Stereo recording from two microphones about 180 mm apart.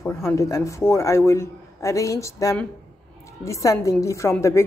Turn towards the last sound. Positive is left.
turn(degrees=15)  # may be behind; listen again after turning